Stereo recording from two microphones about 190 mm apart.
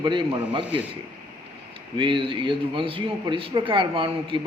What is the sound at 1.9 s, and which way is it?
A man's voice, 25° right (ahead or behind).